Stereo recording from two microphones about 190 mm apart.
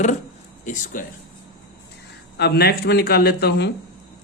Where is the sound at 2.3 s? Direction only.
60° left (ahead or behind).